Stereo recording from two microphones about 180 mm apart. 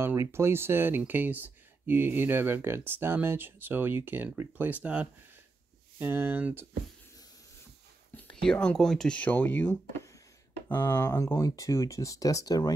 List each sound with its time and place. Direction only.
0.0 s speech: 15° right (ahead or behind)
8.2 s speech: 5° left (ahead or behind); by 12.7 s 20° left (ahead or behind)